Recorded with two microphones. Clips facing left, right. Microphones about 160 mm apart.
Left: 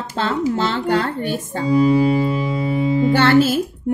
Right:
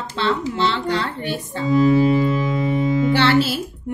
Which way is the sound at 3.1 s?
45° left (ahead or behind).